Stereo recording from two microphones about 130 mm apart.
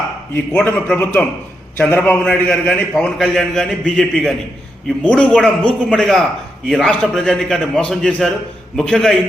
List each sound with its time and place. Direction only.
0.3 s a man's voice: 15° left (ahead or behind)